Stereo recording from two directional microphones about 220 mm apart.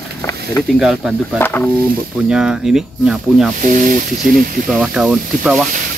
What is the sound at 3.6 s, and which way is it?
Speech, 35° right (ahead or behind).